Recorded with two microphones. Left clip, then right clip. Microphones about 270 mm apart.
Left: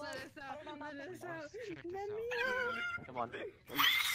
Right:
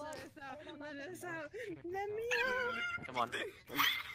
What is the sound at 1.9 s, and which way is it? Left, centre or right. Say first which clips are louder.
Speech: right 3 dB; right.